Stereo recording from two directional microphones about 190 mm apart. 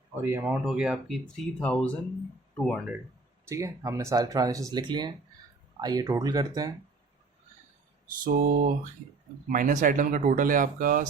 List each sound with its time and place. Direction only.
0.2 s speech: 10° right (ahead or behind)
3.5 s speech: 15° right (ahead or behind)
8.2 s speech: 50° right (ahead or behind)